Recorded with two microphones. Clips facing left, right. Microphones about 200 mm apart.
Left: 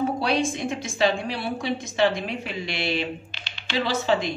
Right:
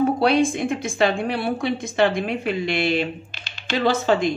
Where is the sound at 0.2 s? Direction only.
55° right (ahead or behind).